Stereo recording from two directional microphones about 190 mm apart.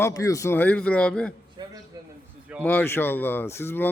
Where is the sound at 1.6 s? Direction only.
25° right (ahead or behind).